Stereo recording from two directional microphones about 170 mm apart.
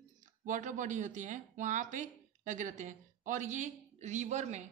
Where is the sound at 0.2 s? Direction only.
45° right (ahead or behind).